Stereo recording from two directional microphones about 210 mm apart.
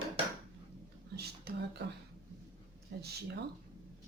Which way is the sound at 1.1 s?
50° right (ahead or behind).